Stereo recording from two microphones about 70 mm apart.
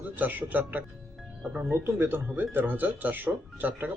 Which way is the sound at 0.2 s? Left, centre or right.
Right.